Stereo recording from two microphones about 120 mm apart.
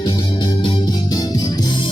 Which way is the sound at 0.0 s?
35° left (ahead or behind).